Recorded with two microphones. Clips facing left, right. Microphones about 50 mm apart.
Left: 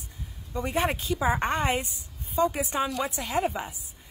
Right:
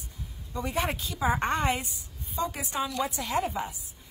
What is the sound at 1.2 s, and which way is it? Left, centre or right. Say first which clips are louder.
Speech: even; centre.